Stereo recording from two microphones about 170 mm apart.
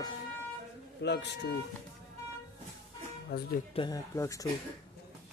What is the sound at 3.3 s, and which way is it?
Speech, 60° left (ahead or behind).